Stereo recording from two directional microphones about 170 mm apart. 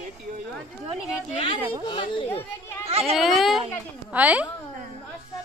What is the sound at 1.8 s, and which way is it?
Speech, 30° left (ahead or behind).